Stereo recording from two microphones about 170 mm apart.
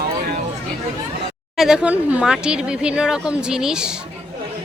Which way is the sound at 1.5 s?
5° right (ahead or behind).